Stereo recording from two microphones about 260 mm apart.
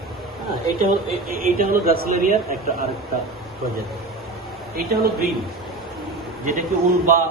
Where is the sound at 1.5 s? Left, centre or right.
Right.